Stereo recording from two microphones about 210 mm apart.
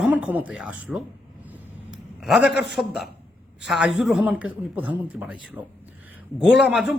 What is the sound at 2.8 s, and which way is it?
A man's voice, centre (ahead or behind).